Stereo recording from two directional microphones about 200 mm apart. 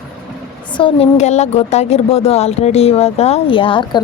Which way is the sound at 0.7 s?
25° left (ahead or behind).